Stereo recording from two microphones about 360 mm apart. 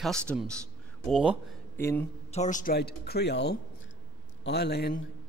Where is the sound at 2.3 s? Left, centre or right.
Centre.